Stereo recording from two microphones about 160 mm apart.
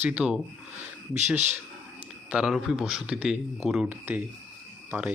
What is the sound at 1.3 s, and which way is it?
Speech, 45° right (ahead or behind).